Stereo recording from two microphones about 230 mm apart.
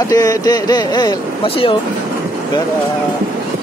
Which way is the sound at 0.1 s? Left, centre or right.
Centre.